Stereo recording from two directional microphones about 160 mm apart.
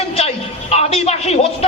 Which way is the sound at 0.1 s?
40° left (ahead or behind).